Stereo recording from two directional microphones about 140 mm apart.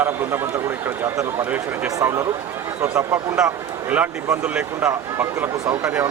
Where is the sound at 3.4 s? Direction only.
5° right (ahead or behind).